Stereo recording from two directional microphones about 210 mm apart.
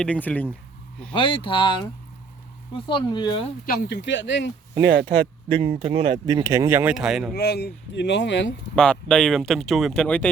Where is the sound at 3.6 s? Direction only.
45° left (ahead or behind).